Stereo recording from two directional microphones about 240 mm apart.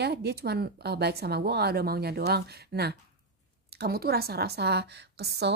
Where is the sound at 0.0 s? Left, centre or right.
Right.